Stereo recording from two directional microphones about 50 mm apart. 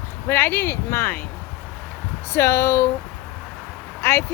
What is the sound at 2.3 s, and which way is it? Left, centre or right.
Speech, left.